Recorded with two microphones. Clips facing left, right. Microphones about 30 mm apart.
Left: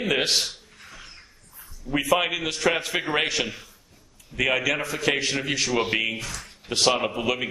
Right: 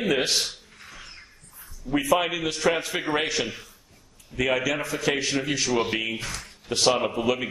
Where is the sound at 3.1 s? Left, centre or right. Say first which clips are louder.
Left 1 dB; left.